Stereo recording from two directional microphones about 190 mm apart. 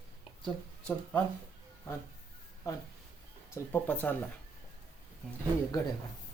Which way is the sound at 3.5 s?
10° left (ahead or behind).